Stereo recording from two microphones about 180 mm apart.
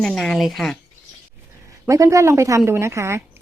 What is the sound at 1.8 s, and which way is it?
A woman's voice, 15° right (ahead or behind).